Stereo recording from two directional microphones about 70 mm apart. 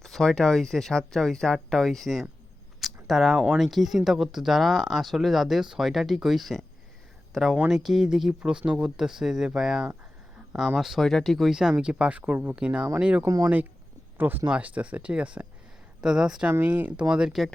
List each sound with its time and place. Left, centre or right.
0.0 s speech: centre
2.8 s a sound: centre
3.4 s speech: centre
13.2 s speech: right
14.2 s speech: right; by 17.4 s centre